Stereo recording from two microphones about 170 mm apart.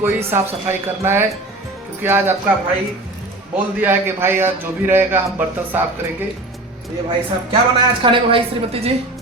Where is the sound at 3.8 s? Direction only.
10° right (ahead or behind).